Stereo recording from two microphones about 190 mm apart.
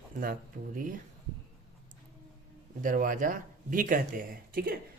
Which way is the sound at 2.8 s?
45° right (ahead or behind).